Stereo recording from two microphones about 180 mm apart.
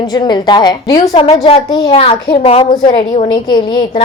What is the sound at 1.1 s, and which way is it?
A woman's voice, 35° left (ahead or behind).